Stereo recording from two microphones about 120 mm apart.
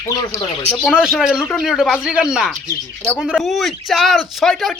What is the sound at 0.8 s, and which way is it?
Speech, 5° right (ahead or behind).